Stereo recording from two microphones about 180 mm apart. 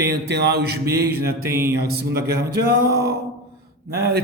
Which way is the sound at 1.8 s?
60° right (ahead or behind).